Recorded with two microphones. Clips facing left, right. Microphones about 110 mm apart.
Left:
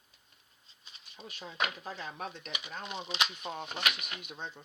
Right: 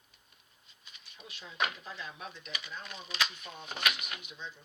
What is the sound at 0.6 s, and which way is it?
Speech, 30° left (ahead or behind).